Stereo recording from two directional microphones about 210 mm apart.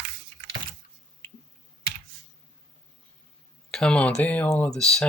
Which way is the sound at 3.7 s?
5° left (ahead or behind).